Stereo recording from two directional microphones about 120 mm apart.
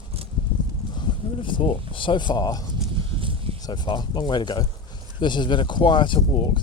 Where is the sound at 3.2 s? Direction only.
45° right (ahead or behind).